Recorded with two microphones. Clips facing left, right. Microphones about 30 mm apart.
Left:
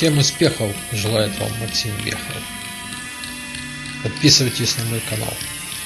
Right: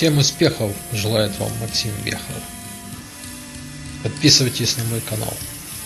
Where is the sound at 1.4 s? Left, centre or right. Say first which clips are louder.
Left 1 dB; left.